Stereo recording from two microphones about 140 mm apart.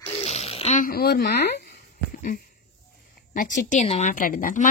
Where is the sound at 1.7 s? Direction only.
85° left.